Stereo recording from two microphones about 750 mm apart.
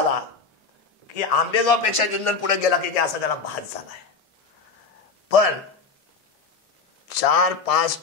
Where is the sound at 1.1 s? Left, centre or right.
Left.